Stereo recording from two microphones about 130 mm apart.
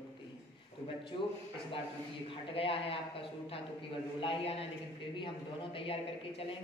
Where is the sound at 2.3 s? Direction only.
45° left (ahead or behind).